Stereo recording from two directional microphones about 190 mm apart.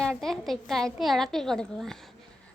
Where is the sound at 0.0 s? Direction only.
5° left (ahead or behind).